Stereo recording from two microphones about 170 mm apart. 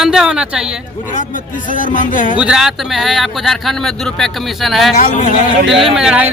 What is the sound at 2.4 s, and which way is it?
Speech, 5° right (ahead or behind).